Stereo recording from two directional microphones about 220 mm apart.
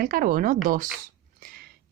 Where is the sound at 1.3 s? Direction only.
40° right (ahead or behind).